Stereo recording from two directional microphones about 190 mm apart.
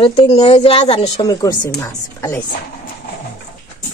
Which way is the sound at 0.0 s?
30° left (ahead or behind).